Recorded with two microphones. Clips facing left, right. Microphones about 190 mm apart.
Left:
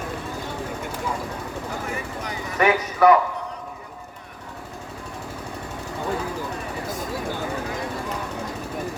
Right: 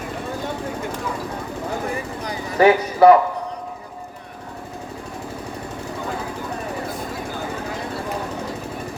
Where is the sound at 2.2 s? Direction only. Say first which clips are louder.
Right 6 dB; 30° right (ahead or behind).